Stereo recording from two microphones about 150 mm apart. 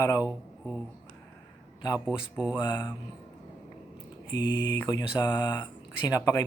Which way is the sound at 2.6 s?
25° left (ahead or behind).